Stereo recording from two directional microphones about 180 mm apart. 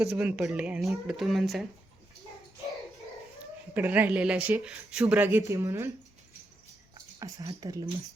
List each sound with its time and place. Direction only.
0.0 s speech: 10° right (ahead or behind)
3.8 s speech: 10° right (ahead or behind)
7.2 s speech: 20° right (ahead or behind)